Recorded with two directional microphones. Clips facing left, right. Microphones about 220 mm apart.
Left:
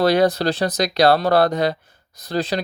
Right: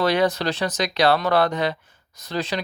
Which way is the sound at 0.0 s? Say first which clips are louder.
Left 4 dB; 35° left (ahead or behind).